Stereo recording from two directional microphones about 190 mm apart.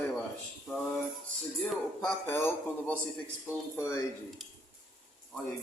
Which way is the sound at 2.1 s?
10° left (ahead or behind).